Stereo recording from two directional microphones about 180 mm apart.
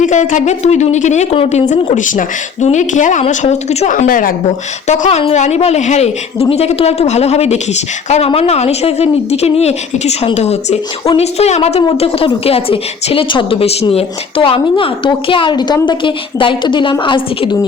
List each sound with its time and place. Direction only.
0.0 s a woman's voice: 45° left (ahead or behind)
4.9 s a woman's voice: 35° left (ahead or behind)